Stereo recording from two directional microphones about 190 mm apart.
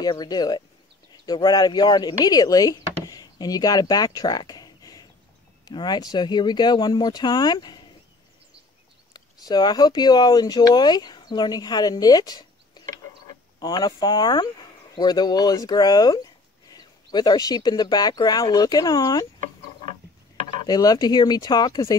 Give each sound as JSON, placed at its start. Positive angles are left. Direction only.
{"t": 0.0, "sound": "speech", "side_deg": 20}
{"t": 3.1, "sound": "a sound", "side_deg": 20}
{"t": 5.7, "sound": "speech", "side_deg": 20}
{"t": 9.1, "sound": "speech", "side_deg": 20}
{"t": 20.6, "sound": "speech", "side_deg": 20}